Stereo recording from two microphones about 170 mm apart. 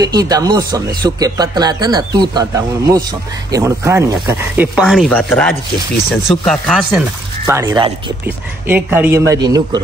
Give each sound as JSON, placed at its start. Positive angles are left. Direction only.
{"t": 0.0, "sound": "a man's voice", "side_deg": -20}
{"t": 4.7, "sound": "speech", "side_deg": 0}
{"t": 7.4, "sound": "a man's voice", "side_deg": -15}